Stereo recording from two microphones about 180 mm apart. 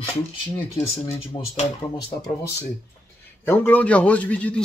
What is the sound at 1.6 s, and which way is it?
Speech, 30° left (ahead or behind).